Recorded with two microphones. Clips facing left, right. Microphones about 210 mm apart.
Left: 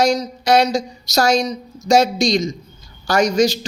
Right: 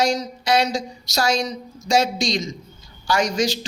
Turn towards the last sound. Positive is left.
turn(degrees=40)  # may be behind; listen again after turning